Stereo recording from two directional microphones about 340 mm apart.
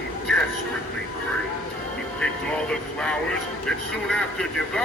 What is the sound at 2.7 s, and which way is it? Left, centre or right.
Vehicle, centre.